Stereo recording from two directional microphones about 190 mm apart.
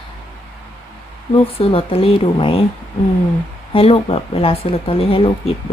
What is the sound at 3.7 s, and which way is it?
Speech, 30° left (ahead or behind).